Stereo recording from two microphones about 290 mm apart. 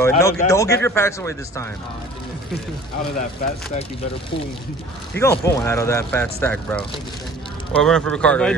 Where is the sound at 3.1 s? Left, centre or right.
Left.